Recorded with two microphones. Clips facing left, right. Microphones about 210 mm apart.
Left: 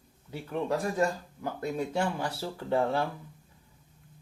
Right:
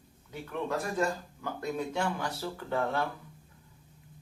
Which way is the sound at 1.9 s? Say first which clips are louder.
Left 2 dB; 30° left (ahead or behind).